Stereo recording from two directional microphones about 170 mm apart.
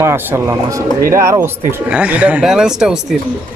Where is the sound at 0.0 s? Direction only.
15° right (ahead or behind).